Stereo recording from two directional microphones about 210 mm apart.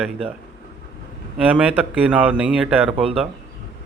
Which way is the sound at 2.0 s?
5° right (ahead or behind).